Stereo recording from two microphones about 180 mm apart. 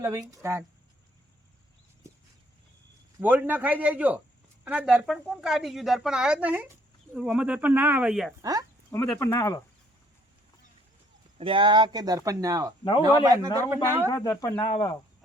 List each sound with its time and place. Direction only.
0.0 s a man's voice: 20° right (ahead or behind)
3.2 s a man's voice: 10° right (ahead or behind)
8.4 s speech: 20° right (ahead or behind)
8.9 s speech: 15° left (ahead or behind)
11.3 s speech: 30° right (ahead or behind)
14.1 s speech: 20° left (ahead or behind)
14.6 s speech: 30° left (ahead or behind)